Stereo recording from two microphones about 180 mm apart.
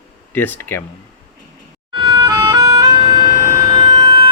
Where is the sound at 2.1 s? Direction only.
20° right (ahead or behind).